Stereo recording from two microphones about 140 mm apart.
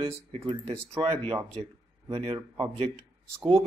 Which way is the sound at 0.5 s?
45° right (ahead or behind).